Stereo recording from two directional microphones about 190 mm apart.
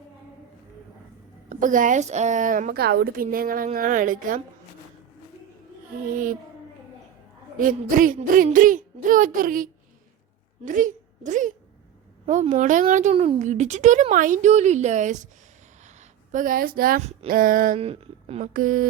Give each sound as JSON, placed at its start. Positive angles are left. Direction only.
{"t": 1.5, "sound": "a woman's voice", "side_deg": -45}
{"t": 6.1, "sound": "a woman's voice", "side_deg": -45}
{"t": 7.6, "sound": "a woman's voice", "side_deg": -45}
{"t": 17.7, "sound": "a woman's voice", "side_deg": -30}